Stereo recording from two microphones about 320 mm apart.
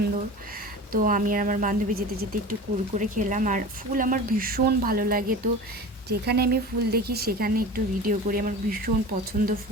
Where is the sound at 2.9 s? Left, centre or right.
Right.